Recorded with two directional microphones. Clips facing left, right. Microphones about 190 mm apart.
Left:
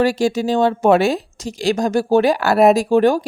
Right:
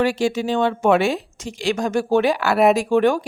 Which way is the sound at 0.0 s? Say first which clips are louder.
Left 3 dB; 40° left (ahead or behind).